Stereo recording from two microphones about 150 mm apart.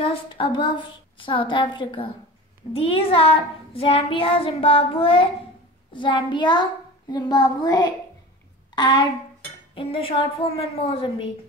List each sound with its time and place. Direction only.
0.0 s child singing: 35° left (ahead or behind)
5.9 s a child's voice: 35° left (ahead or behind)
8.7 s child singing: 30° left (ahead or behind)